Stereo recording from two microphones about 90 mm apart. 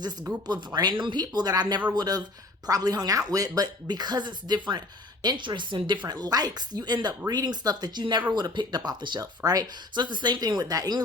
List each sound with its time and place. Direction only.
0.4 s speech: 50° right (ahead or behind)
6.1 s speech: 45° right (ahead or behind)
9.4 s speech: 40° right (ahead or behind)
9.9 s speech: 55° right (ahead or behind)